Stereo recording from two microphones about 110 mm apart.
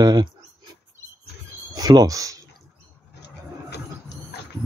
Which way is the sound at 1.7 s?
40° right (ahead or behind).